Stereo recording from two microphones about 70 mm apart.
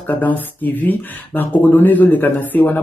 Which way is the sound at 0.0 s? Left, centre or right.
Left.